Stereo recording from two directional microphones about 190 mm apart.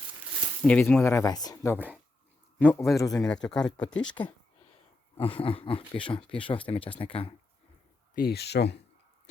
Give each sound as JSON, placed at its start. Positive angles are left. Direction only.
{"t": 0.6, "sound": "speech", "side_deg": 5}
{"t": 2.7, "sound": "speech", "side_deg": 0}
{"t": 3.0, "sound": "speech", "side_deg": 20}
{"t": 3.2, "sound": "speech", "side_deg": 5}
{"t": 5.1, "sound": "speech", "side_deg": 30}
{"t": 8.1, "sound": "speech", "side_deg": 55}